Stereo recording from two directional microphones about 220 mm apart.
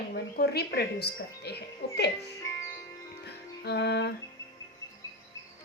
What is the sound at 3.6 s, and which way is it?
Speech, 50° left (ahead or behind).